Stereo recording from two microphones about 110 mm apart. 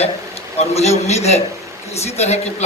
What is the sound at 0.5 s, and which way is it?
A man's voice, 80° left.